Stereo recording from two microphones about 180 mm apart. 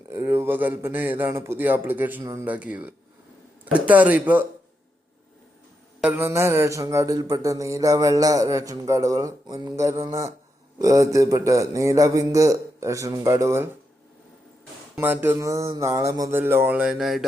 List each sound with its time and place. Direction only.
0.1 s speech: 15° right (ahead or behind)
6.0 s speech: 10° right (ahead or behind)
14.9 s speech: 10° right (ahead or behind)